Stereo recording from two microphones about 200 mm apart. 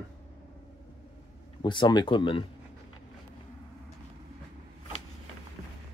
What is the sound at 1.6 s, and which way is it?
Speech, 20° left (ahead or behind).